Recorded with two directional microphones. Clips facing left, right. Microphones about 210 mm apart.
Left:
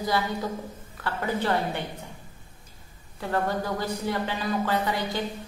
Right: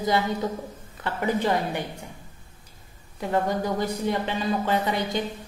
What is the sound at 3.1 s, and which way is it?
A woman's voice, 15° right (ahead or behind).